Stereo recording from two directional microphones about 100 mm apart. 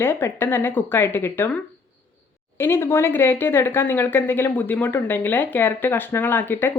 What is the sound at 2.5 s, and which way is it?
Speech, 25° left (ahead or behind).